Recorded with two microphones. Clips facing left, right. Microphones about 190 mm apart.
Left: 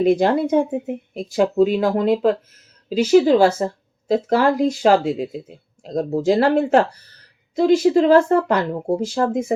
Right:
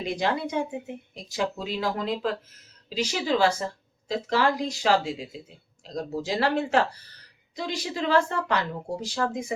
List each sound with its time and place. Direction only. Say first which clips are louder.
0.0 s speech: left 11 dB; 50° left (ahead or behind)